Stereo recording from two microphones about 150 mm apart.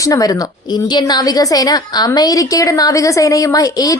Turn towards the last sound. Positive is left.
turn(degrees=25)  # may be behind; listen again after turning